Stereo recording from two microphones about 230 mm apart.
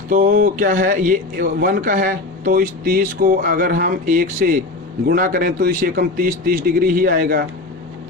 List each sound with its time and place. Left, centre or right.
0.1 s speech: right